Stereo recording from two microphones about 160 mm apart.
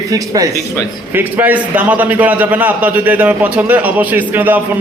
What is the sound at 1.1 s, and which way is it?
A man's voice, 10° right (ahead or behind).